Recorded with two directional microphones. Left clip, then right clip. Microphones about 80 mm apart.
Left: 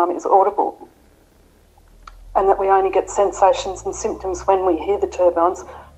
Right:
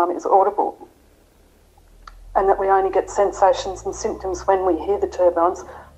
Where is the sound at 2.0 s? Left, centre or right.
Left.